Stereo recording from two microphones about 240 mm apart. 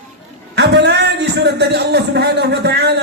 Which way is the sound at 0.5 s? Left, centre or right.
Right.